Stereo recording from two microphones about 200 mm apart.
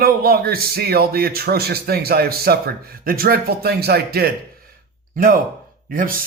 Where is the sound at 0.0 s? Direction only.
50° right (ahead or behind).